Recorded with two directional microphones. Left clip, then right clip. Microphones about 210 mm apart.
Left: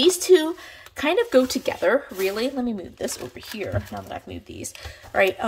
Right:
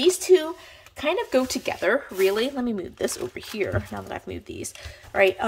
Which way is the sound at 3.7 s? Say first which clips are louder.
Even; 25° right (ahead or behind).